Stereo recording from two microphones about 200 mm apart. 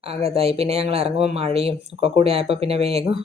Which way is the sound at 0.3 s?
30° right (ahead or behind).